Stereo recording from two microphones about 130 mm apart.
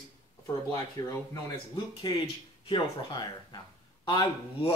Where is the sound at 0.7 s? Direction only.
25° left (ahead or behind).